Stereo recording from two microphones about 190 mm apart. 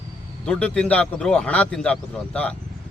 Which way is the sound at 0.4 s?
5° left (ahead or behind).